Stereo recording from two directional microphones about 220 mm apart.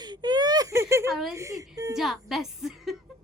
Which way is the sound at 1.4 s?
15° right (ahead or behind).